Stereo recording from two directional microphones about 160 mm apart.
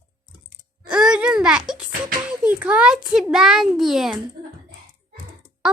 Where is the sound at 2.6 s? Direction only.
5° right (ahead or behind).